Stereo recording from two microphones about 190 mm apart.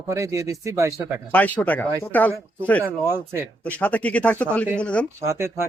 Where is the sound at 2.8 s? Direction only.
10° right (ahead or behind).